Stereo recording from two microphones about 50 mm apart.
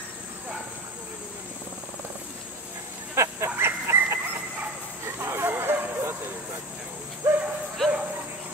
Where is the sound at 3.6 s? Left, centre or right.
Right.